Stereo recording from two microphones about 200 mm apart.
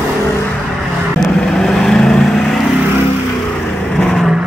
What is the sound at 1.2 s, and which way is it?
Vehicle, centre (ahead or behind).